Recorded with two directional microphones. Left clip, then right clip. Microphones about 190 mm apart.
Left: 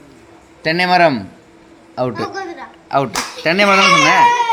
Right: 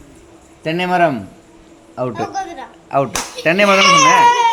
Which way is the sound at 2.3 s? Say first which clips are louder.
Right 2 dB; 70° right (ahead or behind).